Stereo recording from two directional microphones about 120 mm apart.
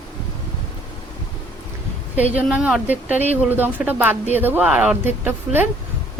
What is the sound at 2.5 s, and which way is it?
A woman's voice, 5° right (ahead or behind).